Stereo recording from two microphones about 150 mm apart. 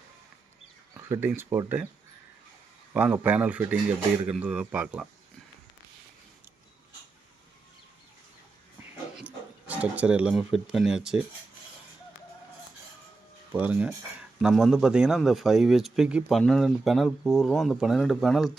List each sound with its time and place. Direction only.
1.0 s a man's voice: 15° right (ahead or behind)
2.9 s a man's voice: 10° right (ahead or behind)
9.1 s speech: 10° right (ahead or behind)
13.5 s a man's voice: 10° right (ahead or behind)